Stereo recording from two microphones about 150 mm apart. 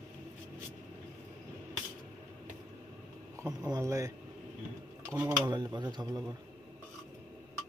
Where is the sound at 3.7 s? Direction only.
20° right (ahead or behind).